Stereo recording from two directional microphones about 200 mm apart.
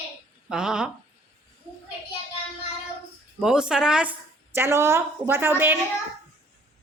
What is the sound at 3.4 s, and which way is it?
A woman's voice, 5° right (ahead or behind).